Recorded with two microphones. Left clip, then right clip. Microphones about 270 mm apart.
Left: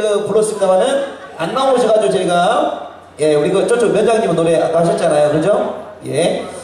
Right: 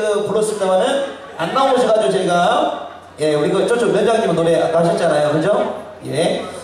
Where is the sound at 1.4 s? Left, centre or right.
Centre.